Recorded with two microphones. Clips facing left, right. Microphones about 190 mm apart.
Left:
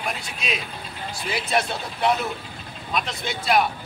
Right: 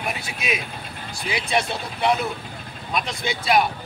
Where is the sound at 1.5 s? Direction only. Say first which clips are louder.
Even; centre (ahead or behind).